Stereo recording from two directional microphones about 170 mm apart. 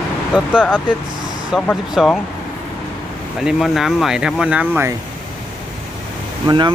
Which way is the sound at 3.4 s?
Centre (ahead or behind).